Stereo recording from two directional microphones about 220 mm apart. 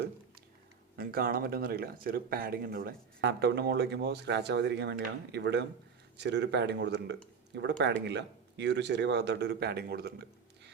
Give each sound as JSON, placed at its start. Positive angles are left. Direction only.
{"t": 0.9, "sound": "speech", "side_deg": -40}